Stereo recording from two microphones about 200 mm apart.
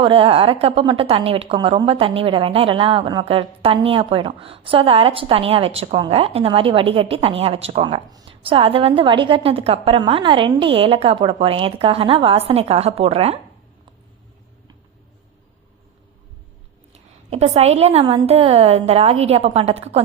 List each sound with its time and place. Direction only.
0.0 s a woman's voice: 25° right (ahead or behind)
16.9 s a woman's voice: 30° right (ahead or behind)